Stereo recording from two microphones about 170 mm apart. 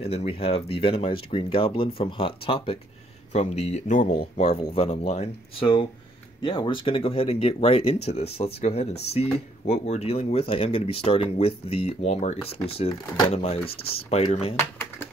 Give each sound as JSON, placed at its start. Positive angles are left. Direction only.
{"t": 0.0, "sound": "speech", "side_deg": 35}